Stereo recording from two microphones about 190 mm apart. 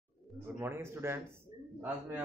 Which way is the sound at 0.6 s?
10° right (ahead or behind).